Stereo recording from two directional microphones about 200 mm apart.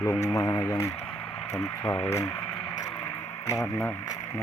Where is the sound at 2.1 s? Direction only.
15° left (ahead or behind).